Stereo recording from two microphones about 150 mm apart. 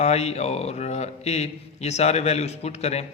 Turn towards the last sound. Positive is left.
turn(degrees=45)  # may be behind; listen again after turning